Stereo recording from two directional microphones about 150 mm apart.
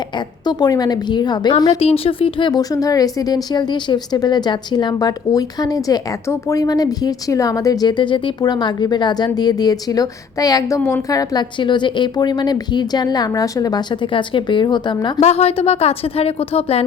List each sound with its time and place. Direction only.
0.4 s speech: 25° left (ahead or behind)
1.8 s speech: 40° left (ahead or behind)
15.2 s a woman's voice: 45° left (ahead or behind)